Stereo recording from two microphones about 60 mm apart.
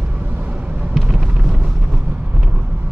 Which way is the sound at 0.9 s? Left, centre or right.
Centre.